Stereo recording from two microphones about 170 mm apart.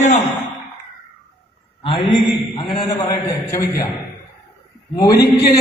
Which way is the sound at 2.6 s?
25° left (ahead or behind).